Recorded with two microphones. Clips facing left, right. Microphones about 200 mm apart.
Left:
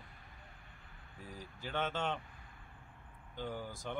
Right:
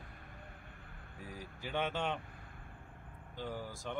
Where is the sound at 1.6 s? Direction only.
10° right (ahead or behind).